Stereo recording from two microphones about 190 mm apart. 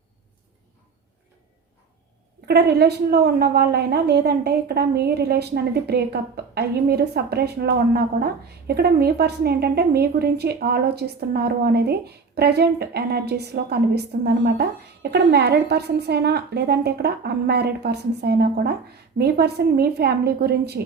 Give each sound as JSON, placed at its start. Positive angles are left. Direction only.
{"t": 2.5, "sound": "a woman's voice", "side_deg": -60}